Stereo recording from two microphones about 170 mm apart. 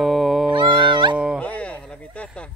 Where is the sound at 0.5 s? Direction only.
30° right (ahead or behind).